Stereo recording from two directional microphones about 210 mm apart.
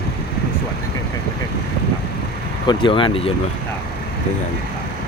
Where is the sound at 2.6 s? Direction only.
25° left (ahead or behind).